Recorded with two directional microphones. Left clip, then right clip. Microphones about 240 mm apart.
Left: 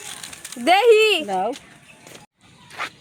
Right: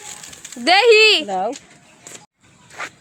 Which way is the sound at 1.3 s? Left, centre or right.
Centre.